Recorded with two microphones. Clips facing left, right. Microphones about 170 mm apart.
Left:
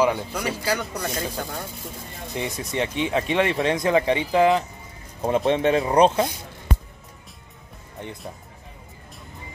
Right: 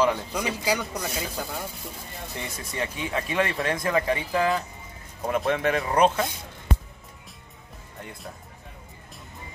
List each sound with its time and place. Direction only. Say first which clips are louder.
0.3 s speech: left 1 dB; 10° right (ahead or behind)
2.3 s speech: left 7 dB; 20° left (ahead or behind)